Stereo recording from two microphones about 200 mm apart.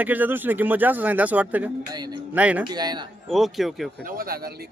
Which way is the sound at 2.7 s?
20° right (ahead or behind).